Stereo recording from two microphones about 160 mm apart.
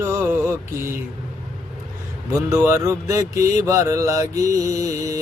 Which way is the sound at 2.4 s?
15° right (ahead or behind).